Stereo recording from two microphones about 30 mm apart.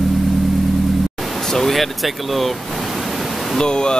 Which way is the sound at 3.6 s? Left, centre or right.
Left.